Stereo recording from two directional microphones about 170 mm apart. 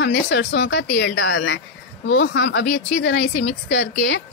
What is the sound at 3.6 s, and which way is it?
Speech, 90° left.